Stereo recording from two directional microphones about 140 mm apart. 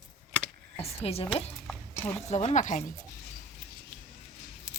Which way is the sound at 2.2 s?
50° left (ahead or behind).